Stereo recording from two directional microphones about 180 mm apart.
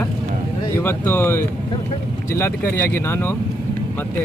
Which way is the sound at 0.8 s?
10° left (ahead or behind).